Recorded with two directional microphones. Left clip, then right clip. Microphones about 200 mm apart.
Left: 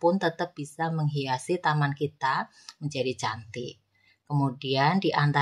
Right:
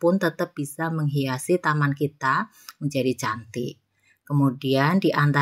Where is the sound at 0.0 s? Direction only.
15° right (ahead or behind).